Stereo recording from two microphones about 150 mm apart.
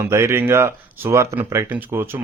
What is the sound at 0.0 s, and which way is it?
Speech, 15° right (ahead or behind).